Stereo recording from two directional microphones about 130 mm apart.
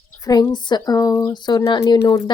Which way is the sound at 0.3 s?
35° left (ahead or behind).